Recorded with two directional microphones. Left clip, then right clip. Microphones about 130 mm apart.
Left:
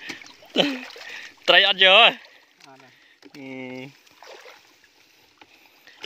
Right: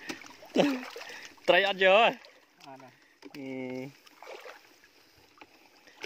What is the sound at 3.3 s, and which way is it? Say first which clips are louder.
Speech: left 2 dB; 10° right (ahead or behind).